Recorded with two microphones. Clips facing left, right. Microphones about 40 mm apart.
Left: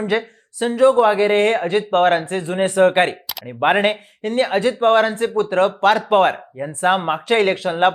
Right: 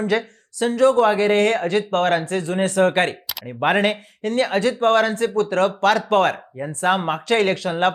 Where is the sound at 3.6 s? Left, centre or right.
Centre.